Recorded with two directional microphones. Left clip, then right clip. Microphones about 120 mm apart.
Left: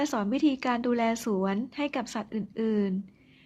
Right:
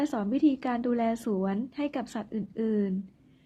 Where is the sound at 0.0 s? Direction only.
30° left (ahead or behind).